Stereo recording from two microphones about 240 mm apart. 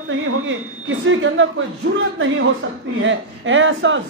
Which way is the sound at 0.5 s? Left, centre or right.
Right.